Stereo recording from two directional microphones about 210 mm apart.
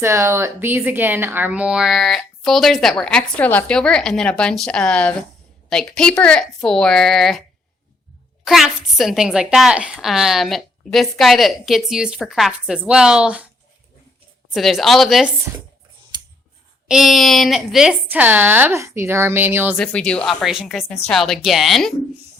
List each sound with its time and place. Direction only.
0.0 s a woman's voice: 10° right (ahead or behind)
8.4 s a woman's voice: centre (ahead or behind)
14.5 s a woman's voice: centre (ahead or behind)
16.1 s clicking: 20° right (ahead or behind)
16.9 s speech: centre (ahead or behind)
19.7 s a woman's voice: 5° left (ahead or behind)